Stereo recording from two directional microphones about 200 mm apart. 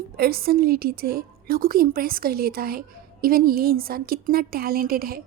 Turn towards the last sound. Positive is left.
turn(degrees=-50)  # may be behind; listen again after turning